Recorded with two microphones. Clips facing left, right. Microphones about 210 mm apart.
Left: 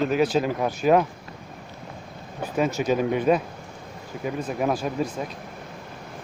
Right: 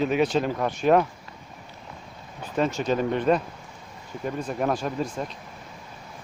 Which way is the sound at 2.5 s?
5° left (ahead or behind).